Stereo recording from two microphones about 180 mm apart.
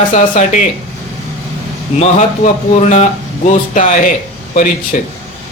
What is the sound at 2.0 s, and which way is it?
Speech, 40° left (ahead or behind).